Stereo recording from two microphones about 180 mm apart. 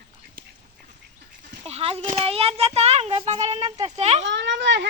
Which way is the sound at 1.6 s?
30° right (ahead or behind).